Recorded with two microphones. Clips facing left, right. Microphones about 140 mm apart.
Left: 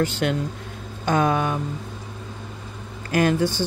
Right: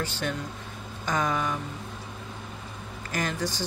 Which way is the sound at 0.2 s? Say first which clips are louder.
Left 8 dB; 65° left (ahead or behind).